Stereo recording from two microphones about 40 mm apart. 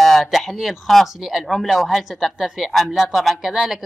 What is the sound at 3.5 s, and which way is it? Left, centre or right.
Speech, centre.